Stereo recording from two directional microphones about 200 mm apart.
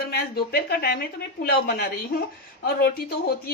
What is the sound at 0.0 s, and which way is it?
A woman's voice, 50° left (ahead or behind).